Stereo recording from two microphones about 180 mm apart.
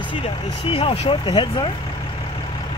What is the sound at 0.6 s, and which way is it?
Speech, 30° left (ahead or behind).